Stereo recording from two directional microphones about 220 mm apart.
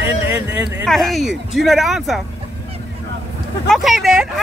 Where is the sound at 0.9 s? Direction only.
Centre (ahead or behind).